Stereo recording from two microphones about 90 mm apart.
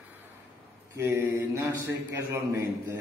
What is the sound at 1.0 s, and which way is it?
Speech, 30° right (ahead or behind).